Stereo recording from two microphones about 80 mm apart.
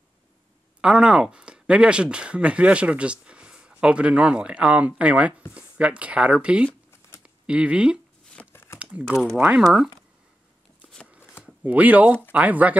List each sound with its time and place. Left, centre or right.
0.7 s speech: centre
8.4 s a sound: centre
8.7 s crumpling: centre
9.6 s speech: centre
11.6 s speech: centre